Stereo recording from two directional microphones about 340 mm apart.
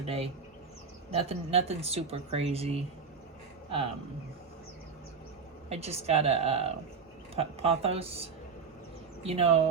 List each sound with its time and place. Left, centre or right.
0.0 s speech: centre
5.6 s speech: centre